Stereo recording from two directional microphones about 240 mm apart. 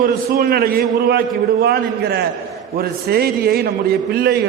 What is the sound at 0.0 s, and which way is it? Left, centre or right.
A man's voice, right.